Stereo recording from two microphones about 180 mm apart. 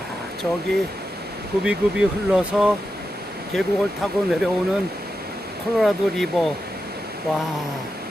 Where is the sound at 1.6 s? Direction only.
5° right (ahead or behind).